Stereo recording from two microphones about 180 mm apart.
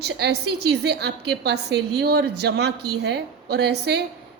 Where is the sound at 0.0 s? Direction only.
65° right (ahead or behind).